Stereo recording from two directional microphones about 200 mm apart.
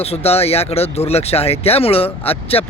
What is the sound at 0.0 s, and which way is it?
Speech, 30° left (ahead or behind).